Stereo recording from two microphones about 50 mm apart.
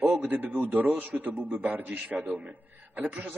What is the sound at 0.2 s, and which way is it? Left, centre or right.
A man's voice, right.